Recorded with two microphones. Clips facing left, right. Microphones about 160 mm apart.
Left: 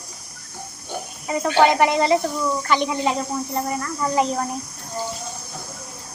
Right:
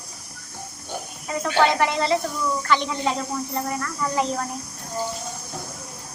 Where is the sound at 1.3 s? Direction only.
15° left (ahead or behind).